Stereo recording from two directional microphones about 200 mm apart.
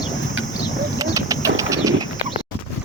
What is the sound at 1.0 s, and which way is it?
Bird, 15° right (ahead or behind).